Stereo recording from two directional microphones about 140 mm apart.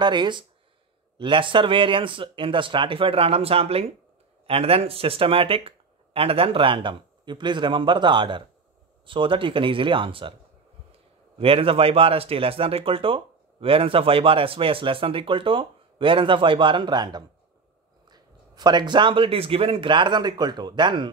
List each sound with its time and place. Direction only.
0.0 s speech: 30° right (ahead or behind)
11.3 s speech: 40° right (ahead or behind)